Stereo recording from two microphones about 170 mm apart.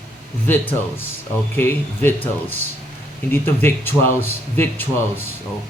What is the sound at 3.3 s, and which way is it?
Speech, 15° left (ahead or behind).